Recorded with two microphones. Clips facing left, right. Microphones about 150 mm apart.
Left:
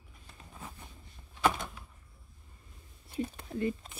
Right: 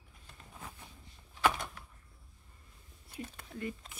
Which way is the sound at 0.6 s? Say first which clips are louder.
Left 2 dB; centre (ahead or behind).